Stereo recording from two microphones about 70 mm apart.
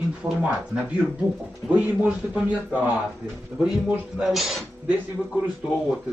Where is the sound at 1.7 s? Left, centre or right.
Right.